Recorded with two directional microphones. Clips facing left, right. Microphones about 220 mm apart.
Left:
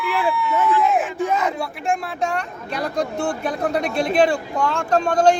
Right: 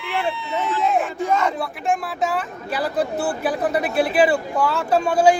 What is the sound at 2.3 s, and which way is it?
Speech, 5° right (ahead or behind).